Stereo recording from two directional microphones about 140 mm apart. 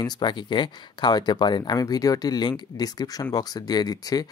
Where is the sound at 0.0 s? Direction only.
30° left (ahead or behind).